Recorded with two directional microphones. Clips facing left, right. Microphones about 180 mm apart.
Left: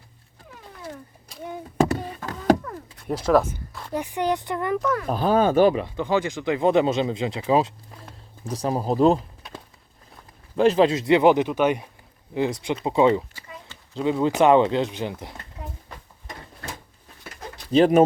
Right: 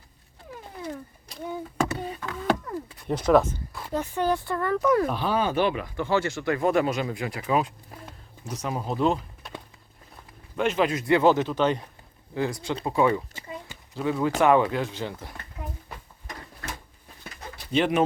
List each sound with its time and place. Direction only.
1.9 s a sound: 40° left (ahead or behind)
3.1 s speech: 5° left (ahead or behind)
3.9 s speech: 15° left (ahead or behind)
5.0 s speech: 45° left (ahead or behind)
5.8 s speech: 15° left (ahead or behind); by 9.2 s 35° left (ahead or behind)
10.6 s speech: 35° left (ahead or behind)
13.3 s a sound: 20° right (ahead or behind)
13.9 s speech: 20° left (ahead or behind)
17.7 s speech: 35° left (ahead or behind)